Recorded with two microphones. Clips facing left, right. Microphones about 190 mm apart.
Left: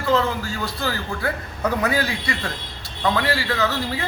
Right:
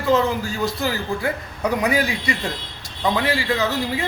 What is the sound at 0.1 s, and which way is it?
A man's voice, 15° right (ahead or behind).